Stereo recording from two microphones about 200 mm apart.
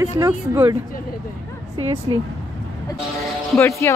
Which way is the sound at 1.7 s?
30° right (ahead or behind).